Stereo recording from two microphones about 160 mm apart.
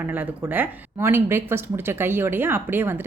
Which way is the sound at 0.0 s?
10° right (ahead or behind).